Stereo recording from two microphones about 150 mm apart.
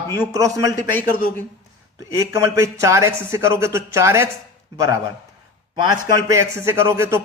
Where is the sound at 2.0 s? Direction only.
20° right (ahead or behind).